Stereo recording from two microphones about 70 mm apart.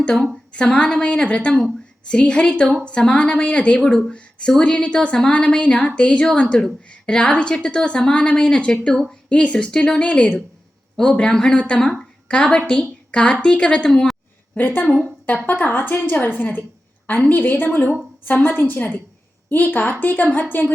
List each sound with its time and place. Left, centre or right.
0.0 s a woman's voice: centre
13.1 s a sound: centre
13.4 s a woman's voice: centre
13.9 s a woman's voice: centre
14.5 s a woman's voice: left